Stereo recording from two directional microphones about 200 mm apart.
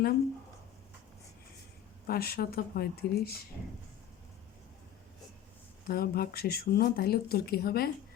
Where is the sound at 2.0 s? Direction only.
50° left (ahead or behind).